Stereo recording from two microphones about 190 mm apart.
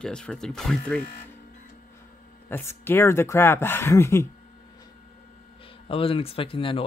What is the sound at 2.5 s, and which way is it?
Speech, 15° left (ahead or behind).